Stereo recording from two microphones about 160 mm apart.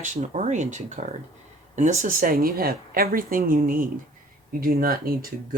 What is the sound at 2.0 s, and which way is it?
Speech, 60° right (ahead or behind).